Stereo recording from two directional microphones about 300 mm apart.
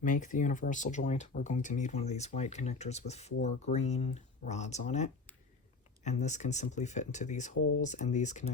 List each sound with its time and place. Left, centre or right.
0.0 s speech: left